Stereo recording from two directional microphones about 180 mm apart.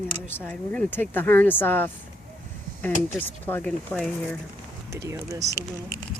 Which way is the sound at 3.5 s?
10° left (ahead or behind).